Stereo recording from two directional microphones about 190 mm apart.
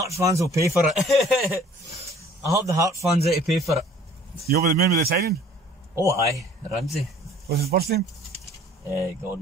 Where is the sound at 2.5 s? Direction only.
15° right (ahead or behind).